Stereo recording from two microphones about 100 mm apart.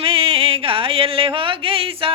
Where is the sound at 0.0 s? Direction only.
65° right (ahead or behind).